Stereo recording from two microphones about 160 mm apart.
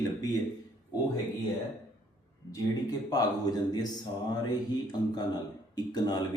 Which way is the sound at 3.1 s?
25° left (ahead or behind).